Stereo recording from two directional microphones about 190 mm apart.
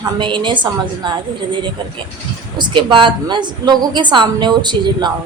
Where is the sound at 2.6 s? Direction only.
25° right (ahead or behind).